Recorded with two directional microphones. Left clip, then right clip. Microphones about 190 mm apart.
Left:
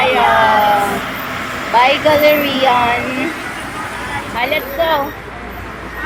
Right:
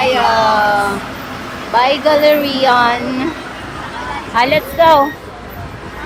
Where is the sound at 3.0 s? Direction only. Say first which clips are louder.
Left 1 dB; 55° left (ahead or behind).